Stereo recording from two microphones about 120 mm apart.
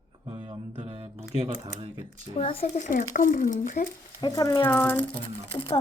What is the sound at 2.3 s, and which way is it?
Speech, 50° left (ahead or behind).